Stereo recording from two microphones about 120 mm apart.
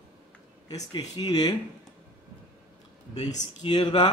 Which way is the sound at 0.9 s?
35° left (ahead or behind).